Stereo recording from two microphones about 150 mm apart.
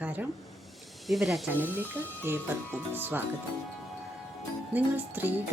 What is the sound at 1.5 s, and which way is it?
Speech, 10° right (ahead or behind).